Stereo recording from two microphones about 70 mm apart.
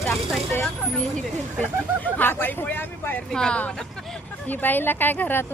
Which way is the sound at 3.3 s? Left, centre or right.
Centre.